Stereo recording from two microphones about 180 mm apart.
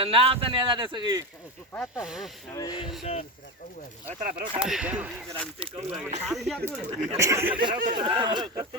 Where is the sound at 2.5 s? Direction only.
20° left (ahead or behind).